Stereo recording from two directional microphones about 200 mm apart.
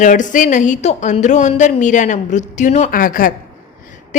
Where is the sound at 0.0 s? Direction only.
40° left (ahead or behind).